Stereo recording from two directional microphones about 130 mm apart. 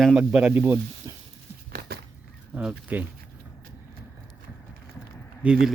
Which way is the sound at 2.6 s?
10° right (ahead or behind).